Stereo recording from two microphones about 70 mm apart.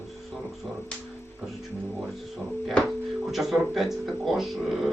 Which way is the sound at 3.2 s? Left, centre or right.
Centre.